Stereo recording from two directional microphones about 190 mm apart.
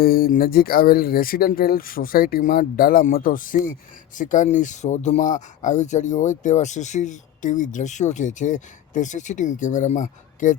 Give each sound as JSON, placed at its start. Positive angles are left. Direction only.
{"t": 0.0, "sound": "speech", "side_deg": 50}